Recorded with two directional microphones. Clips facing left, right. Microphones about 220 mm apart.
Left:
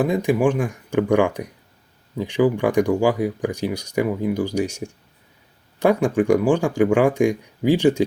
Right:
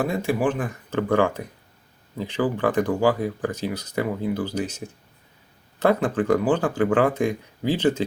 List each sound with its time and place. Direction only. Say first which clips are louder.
0.0 s speech: left 4 dB; 15° left (ahead or behind)